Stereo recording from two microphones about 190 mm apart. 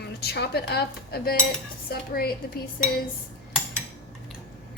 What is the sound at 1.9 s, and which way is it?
Speech, 55° left (ahead or behind).